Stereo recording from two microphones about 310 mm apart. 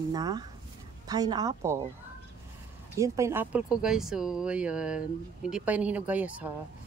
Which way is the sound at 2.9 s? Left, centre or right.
Centre.